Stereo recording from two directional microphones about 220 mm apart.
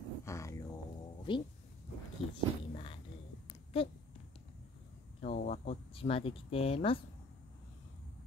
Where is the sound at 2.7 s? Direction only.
25° left (ahead or behind).